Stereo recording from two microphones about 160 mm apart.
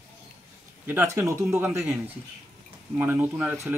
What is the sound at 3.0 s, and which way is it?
Speech, 10° right (ahead or behind).